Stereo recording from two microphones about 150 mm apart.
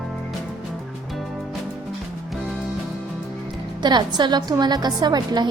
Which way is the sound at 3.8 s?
30° right (ahead or behind).